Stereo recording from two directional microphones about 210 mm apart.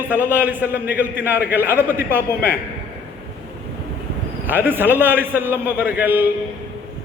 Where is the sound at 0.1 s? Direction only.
10° right (ahead or behind).